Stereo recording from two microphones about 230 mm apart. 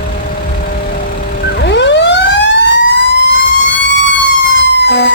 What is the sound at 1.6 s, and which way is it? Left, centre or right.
Emergency vehicle, left.